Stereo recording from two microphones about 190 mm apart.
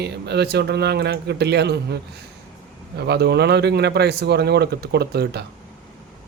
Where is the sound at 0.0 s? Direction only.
60° right (ahead or behind).